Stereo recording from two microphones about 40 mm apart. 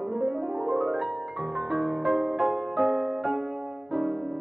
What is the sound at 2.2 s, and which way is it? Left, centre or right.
Music, centre.